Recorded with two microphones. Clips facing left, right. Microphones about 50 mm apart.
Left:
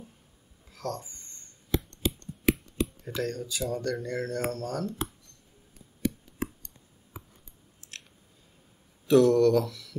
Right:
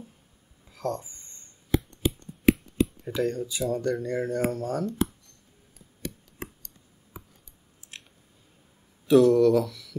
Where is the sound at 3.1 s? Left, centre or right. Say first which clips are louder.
Right 4 dB; centre.